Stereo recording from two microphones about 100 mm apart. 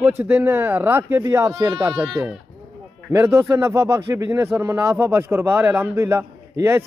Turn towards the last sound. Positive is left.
turn(degrees=-25)  # may be behind; listen again after turning